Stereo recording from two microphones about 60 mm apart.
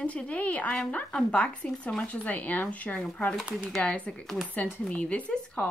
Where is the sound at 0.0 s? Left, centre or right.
Left.